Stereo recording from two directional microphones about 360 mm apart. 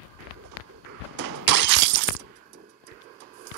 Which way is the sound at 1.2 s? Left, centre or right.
Right.